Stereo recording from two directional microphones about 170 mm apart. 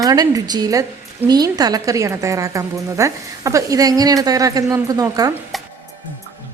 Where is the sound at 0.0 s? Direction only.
20° right (ahead or behind).